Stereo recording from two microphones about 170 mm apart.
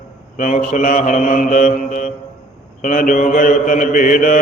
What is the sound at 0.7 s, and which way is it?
Mantra, 50° left (ahead or behind).